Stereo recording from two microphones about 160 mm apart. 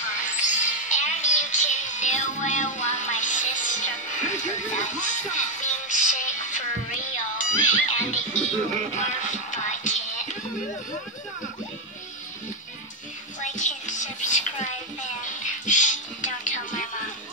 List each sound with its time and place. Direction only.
0.2 s music: 50° left (ahead or behind)
13.4 s music: 50° left (ahead or behind)